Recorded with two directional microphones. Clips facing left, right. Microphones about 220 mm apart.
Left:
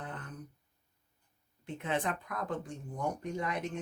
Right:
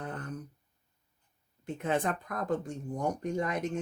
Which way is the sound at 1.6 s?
45° right (ahead or behind).